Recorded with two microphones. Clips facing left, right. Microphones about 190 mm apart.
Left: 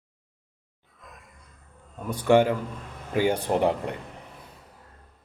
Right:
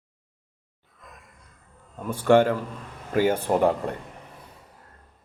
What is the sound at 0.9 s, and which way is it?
Music, centre (ahead or behind).